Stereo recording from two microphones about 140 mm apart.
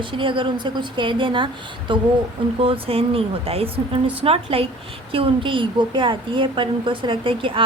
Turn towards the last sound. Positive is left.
turn(degrees=-40)  # may be behind; listen again after turning